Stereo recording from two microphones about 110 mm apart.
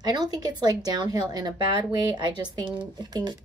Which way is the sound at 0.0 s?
35° right (ahead or behind).